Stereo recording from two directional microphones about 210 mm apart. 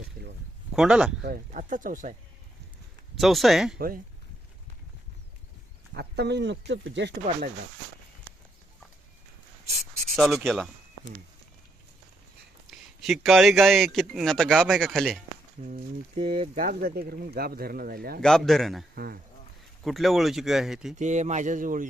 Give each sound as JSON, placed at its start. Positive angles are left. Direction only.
{"t": 0.7, "sound": "speech", "side_deg": -5}
{"t": 1.2, "sound": "speech", "side_deg": -40}
{"t": 3.2, "sound": "a man's voice", "side_deg": 0}
{"t": 3.8, "sound": "speech", "side_deg": -45}
{"t": 5.9, "sound": "speech", "side_deg": -50}
{"t": 10.2, "sound": "a man's voice", "side_deg": 0}
{"t": 13.0, "sound": "a man's voice", "side_deg": 0}
{"t": 15.6, "sound": "speech", "side_deg": -30}
{"t": 16.6, "sound": "speech", "side_deg": -45}
{"t": 18.2, "sound": "a man's voice", "side_deg": 5}
{"t": 18.9, "sound": "speech", "side_deg": -45}
{"t": 19.8, "sound": "a man's voice", "side_deg": 0}
{"t": 21.0, "sound": "speech", "side_deg": -35}